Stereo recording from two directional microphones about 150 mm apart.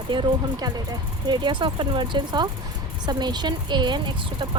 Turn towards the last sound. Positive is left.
turn(degrees=-30)  # may be behind; listen again after turning